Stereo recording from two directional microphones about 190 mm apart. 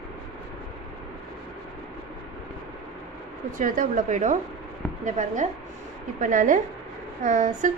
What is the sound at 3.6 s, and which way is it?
A woman's voice, 45° right (ahead or behind).